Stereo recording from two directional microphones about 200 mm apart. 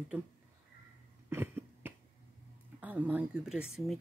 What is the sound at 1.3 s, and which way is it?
Cough, 10° right (ahead or behind).